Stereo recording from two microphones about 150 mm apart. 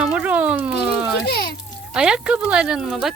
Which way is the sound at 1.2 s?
90° left.